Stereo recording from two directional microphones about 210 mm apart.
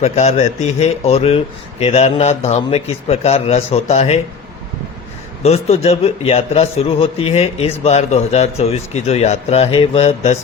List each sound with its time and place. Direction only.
0.0 s a man's voice: 30° left (ahead or behind)
5.4 s a man's voice: 30° left (ahead or behind)